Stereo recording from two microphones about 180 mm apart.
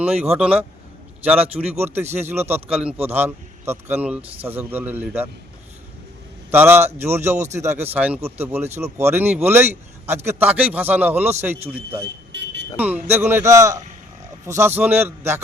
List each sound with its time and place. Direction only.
0.0 s a man's voice: 5° right (ahead or behind)
6.5 s a man's voice: 10° right (ahead or behind)
12.3 s vehicle: 70° right (ahead or behind)
12.7 s a man's voice: 10° right (ahead or behind)